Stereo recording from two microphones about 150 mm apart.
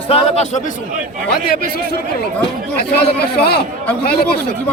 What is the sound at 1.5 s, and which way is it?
Speech, 90° left.